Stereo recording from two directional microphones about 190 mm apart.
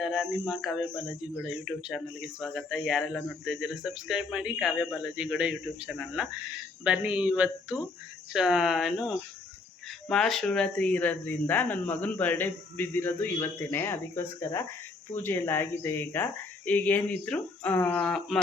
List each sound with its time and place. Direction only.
0.0 s a man's voice: centre (ahead or behind)